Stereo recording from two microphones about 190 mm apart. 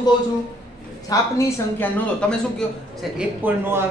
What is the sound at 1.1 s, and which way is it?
Speech, 15° left (ahead or behind).